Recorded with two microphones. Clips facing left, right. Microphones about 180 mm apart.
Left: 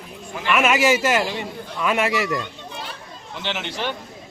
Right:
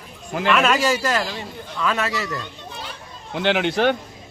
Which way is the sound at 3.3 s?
55° right (ahead or behind).